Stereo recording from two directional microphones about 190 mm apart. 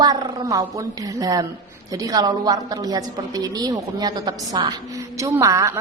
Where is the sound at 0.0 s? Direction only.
20° right (ahead or behind).